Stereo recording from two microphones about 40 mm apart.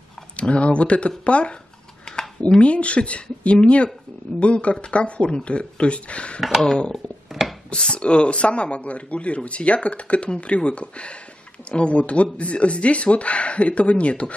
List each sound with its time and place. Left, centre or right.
0.4 s speech: left
2.1 s a sound: centre
2.6 s speech: left
6.6 s speech: centre